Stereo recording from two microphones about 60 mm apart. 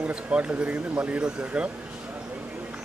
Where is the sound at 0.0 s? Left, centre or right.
Right.